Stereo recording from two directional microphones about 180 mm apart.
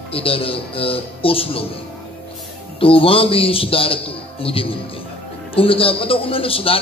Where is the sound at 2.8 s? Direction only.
30° left (ahead or behind).